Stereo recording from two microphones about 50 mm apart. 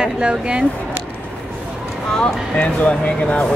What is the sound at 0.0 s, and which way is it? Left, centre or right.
Speech, centre.